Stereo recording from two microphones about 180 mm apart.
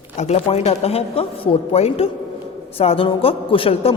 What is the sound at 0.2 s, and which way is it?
A man's voice, 35° left (ahead or behind).